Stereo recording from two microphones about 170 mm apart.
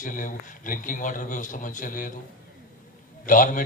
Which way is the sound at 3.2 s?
50° left (ahead or behind).